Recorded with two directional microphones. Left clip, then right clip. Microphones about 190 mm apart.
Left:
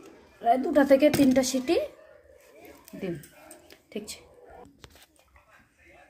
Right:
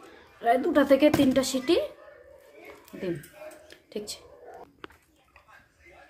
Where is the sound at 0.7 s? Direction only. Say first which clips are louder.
Left 1 dB; 5° left (ahead or behind).